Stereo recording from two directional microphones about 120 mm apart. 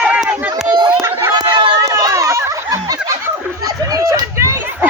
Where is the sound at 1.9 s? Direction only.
30° right (ahead or behind).